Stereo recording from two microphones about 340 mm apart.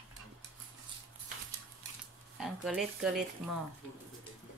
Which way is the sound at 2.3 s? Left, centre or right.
Centre.